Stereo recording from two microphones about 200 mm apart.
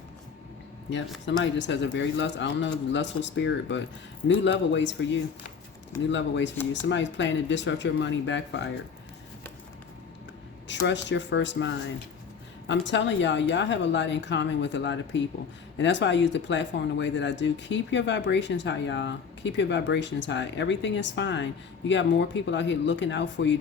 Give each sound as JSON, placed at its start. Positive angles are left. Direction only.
{"t": 1.2, "sound": "speech", "side_deg": 65}
{"t": 10.7, "sound": "speech", "side_deg": 65}